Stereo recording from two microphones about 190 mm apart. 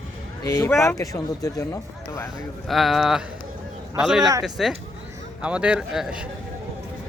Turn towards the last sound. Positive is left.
turn(degrees=-5)  # may be behind; listen again after turning